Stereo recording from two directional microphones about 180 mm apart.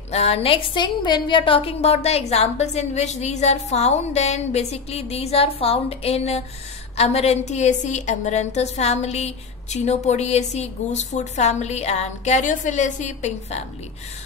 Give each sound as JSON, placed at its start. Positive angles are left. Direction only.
{"t": 0.1, "sound": "a woman's voice", "side_deg": 35}